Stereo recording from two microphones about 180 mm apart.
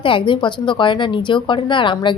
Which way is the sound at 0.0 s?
30° left (ahead or behind).